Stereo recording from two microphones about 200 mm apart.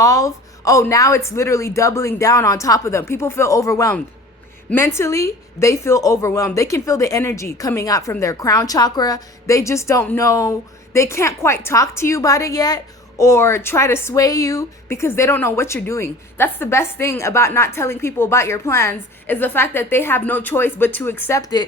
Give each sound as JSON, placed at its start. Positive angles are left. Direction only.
{"t": 0.0, "sound": "a woman's voice", "side_deg": 15}